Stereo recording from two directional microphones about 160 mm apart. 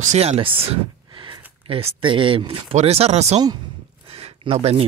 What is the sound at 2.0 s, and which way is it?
Speech, 30° right (ahead or behind).